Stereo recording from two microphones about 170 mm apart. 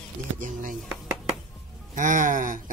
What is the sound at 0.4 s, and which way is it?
Speech, 50° right (ahead or behind).